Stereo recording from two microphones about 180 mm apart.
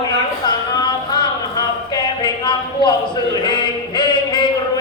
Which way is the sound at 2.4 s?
25° left (ahead or behind).